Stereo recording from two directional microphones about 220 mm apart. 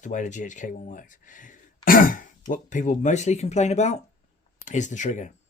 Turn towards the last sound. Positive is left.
turn(degrees=35)  # may be behind; listen again after turning